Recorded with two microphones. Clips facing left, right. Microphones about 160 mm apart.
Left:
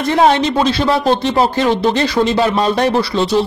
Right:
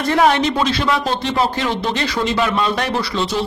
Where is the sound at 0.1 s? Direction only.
30° left (ahead or behind).